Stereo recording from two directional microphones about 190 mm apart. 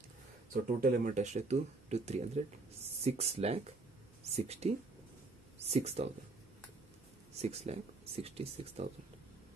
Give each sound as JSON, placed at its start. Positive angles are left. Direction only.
{"t": 0.7, "sound": "speech", "side_deg": -45}
{"t": 7.3, "sound": "speech", "side_deg": -35}